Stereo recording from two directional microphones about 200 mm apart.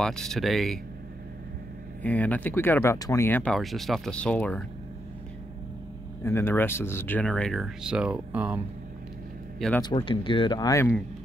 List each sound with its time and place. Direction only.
0.0 s speech: 5° left (ahead or behind)
2.0 s speech: 5° left (ahead or behind)
6.2 s speech: 10° left (ahead or behind); by 8.5 s 10° right (ahead or behind)
9.6 s speech: 5° left (ahead or behind)
9.8 s speech: 25° left (ahead or behind)